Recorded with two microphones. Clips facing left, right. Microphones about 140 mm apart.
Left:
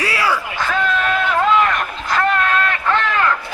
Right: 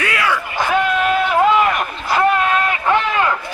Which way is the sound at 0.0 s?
35° left (ahead or behind).